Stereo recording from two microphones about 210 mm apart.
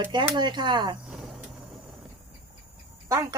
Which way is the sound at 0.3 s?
20° right (ahead or behind).